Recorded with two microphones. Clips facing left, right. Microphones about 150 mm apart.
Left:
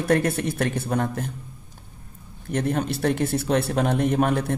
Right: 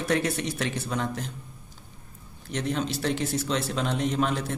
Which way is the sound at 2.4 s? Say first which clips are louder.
Left 4 dB; 55° left (ahead or behind).